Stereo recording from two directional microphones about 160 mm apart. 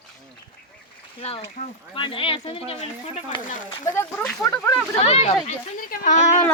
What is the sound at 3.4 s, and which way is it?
Speech, 55° left (ahead or behind).